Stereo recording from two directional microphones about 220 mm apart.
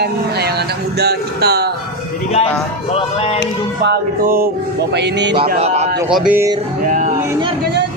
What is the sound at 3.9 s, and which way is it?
Music, 40° right (ahead or behind).